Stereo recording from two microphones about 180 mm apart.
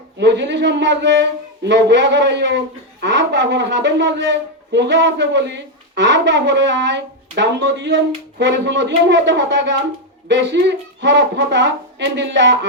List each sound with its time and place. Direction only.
0.2 s a man's voice: 75° right (ahead or behind)